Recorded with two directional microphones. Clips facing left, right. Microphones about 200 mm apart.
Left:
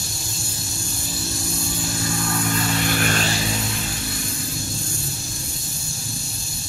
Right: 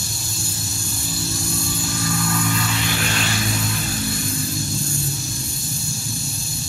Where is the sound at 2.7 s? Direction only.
50° left (ahead or behind).